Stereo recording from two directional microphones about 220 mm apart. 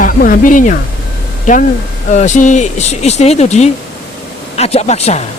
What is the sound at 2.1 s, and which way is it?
Speech, 35° left (ahead or behind).